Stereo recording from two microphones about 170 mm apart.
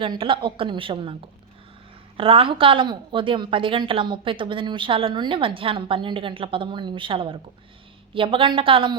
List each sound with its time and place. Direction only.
0.0 s a woman's voice: 30° right (ahead or behind)
2.1 s a woman's voice: 30° right (ahead or behind)